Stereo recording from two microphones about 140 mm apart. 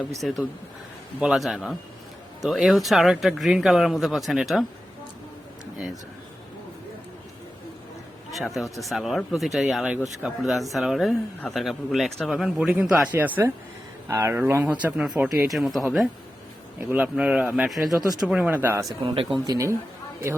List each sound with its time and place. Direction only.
0.2 s speech: centre (ahead or behind)
8.3 s speech: centre (ahead or behind)
16.7 s speech: 10° right (ahead or behind)
17.9 s speech: 25° right (ahead or behind)
18.2 s speech: 5° right (ahead or behind)
19.0 s speech: 35° right (ahead or behind)